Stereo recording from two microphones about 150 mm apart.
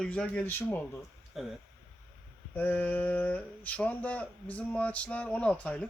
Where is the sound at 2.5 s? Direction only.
10° left (ahead or behind).